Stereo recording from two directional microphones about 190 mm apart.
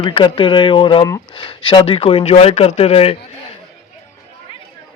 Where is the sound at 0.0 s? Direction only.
25° left (ahead or behind).